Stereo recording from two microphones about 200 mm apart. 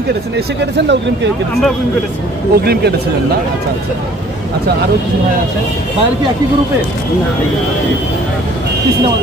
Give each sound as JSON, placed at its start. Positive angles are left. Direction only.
{"t": 0.7, "sound": "speech", "side_deg": -60}
{"t": 2.5, "sound": "speech", "side_deg": -50}